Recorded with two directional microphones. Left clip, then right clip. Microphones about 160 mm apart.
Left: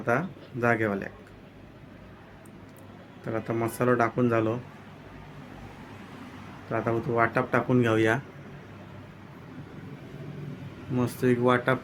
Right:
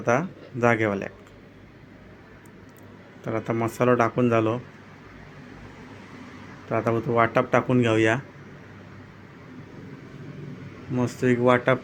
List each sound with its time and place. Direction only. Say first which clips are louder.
0.0 s speech: right 4 dB; 20° right (ahead or behind)
3.2 s speech: right 3 dB; 15° right (ahead or behind)
6.7 s speech: right 4 dB; 15° right (ahead or behind)
10.9 s speech: right 2 dB; 10° right (ahead or behind)